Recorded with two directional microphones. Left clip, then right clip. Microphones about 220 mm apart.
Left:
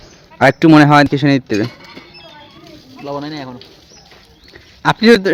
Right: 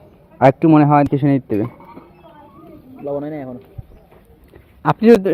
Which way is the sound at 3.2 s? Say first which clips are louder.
Left 1 dB; 20° left (ahead or behind).